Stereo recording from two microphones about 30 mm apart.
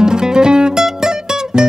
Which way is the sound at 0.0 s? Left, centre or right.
Right.